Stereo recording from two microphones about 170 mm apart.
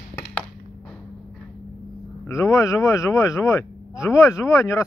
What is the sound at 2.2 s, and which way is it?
Speech, 20° left (ahead or behind).